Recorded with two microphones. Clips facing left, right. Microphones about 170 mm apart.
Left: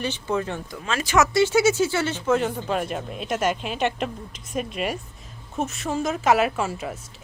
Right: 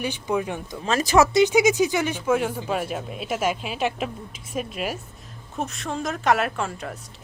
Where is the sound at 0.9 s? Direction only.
40° right (ahead or behind).